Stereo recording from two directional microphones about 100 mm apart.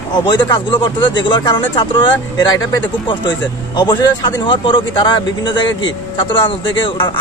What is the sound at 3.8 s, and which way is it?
A man's voice, 45° left (ahead or behind).